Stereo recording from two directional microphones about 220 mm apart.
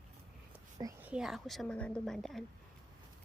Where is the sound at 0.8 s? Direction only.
5° right (ahead or behind).